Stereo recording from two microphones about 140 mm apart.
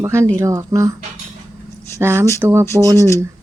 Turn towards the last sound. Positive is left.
turn(degrees=20)  # may be behind; listen again after turning